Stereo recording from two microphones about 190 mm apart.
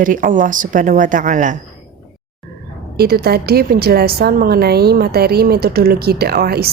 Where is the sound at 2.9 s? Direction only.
55° right (ahead or behind).